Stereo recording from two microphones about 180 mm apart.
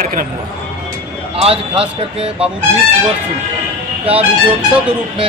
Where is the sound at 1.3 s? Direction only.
30° right (ahead or behind).